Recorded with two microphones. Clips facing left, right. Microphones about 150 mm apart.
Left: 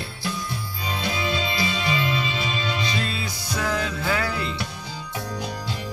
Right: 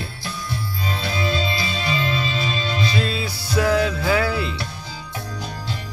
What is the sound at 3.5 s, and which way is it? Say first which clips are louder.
Music: right 7 dB; 10° right (ahead or behind).